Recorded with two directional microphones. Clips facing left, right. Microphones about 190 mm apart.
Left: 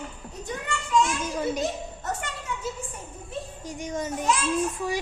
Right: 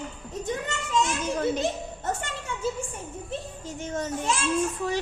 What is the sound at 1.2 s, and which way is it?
Speech, 10° left (ahead or behind).